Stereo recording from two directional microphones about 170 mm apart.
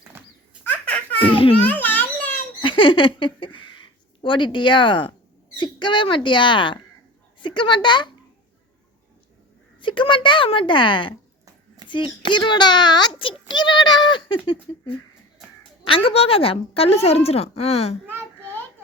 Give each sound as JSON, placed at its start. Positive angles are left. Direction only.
{"t": 0.7, "sound": "baby laughter", "side_deg": 5}
{"t": 1.2, "sound": "speech", "side_deg": 30}
{"t": 1.5, "sound": "a sound", "side_deg": 10}
{"t": 2.6, "sound": "a sound", "side_deg": 30}
{"t": 5.5, "sound": "a child's voice", "side_deg": 25}
{"t": 9.8, "sound": "a child's voice", "side_deg": 30}